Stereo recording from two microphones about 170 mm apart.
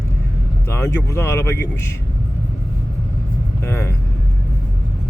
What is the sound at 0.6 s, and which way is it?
Speech, 15° left (ahead or behind).